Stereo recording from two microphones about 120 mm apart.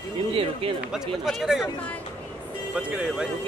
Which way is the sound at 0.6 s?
55° right (ahead or behind).